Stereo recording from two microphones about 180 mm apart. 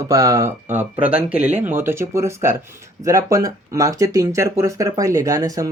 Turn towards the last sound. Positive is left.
turn(degrees=-20)  # may be behind; listen again after turning